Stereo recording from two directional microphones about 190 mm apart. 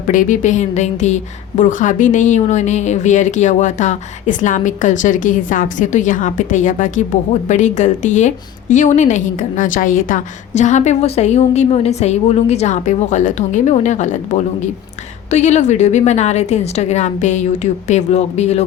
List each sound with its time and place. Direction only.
0.1 s a woman's voice: 40° left (ahead or behind)